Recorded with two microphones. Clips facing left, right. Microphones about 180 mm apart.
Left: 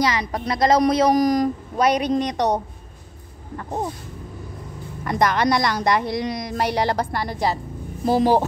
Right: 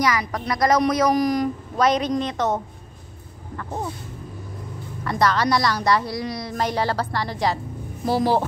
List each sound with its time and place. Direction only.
0.0 s speech: 25° left (ahead or behind)
1.2 s speech: 40° left (ahead or behind)
1.8 s a woman's voice: 10° left (ahead or behind)
5.0 s a woman's voice: 15° left (ahead or behind)